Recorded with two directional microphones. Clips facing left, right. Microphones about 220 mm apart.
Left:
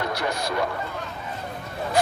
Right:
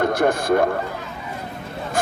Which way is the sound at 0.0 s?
50° right (ahead or behind).